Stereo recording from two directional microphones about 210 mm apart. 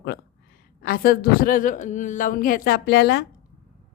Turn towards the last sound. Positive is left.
turn(degrees=50)  # may be behind; listen again after turning